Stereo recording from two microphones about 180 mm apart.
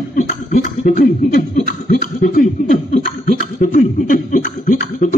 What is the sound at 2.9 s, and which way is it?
Chuckle, 45° left (ahead or behind).